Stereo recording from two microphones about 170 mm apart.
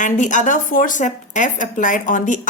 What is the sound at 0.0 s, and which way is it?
A woman's voice, 50° left (ahead or behind).